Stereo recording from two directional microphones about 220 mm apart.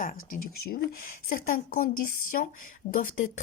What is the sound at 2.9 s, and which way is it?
Speech, 40° left (ahead or behind).